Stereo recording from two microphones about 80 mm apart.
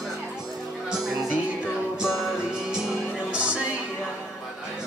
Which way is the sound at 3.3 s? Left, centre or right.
Centre.